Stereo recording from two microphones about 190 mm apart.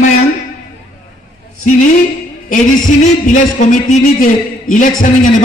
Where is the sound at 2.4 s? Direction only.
45° left (ahead or behind).